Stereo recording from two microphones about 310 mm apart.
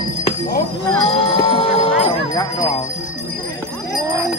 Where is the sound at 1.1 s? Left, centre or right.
Centre.